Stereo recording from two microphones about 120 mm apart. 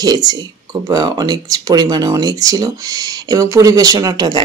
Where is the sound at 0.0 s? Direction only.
35° right (ahead or behind).